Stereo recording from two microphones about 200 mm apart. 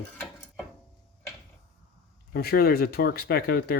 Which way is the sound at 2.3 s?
50° left (ahead or behind).